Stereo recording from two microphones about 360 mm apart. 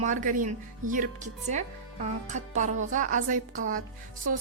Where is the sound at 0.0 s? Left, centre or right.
Right.